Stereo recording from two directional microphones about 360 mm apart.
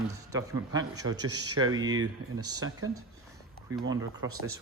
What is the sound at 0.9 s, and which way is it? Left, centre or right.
Speech, right.